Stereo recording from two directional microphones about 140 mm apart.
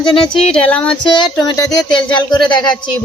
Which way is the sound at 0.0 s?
5° left (ahead or behind).